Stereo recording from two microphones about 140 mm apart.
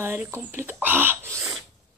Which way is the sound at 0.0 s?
15° right (ahead or behind).